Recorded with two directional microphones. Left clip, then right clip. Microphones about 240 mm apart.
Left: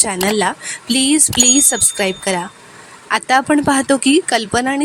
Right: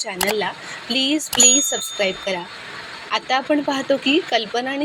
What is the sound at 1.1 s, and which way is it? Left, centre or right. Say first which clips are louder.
Speech: left 2 dB; left.